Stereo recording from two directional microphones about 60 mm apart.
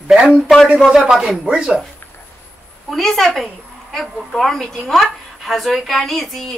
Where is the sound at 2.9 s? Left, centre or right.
Centre.